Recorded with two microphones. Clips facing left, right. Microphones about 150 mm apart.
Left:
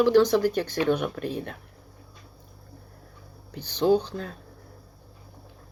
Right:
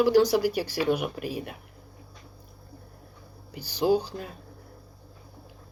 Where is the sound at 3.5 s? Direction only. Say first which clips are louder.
Left 2 dB; 10° right (ahead or behind).